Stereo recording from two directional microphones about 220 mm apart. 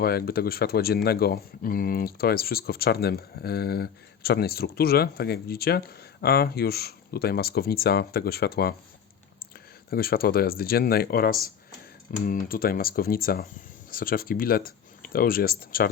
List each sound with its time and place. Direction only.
0.0 s speech: 45° left (ahead or behind)
9.9 s speech: 40° left (ahead or behind)